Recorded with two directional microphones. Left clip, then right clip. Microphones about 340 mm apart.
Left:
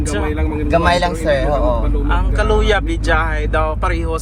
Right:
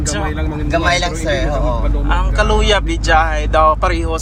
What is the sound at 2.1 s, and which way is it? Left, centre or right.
Speech, centre.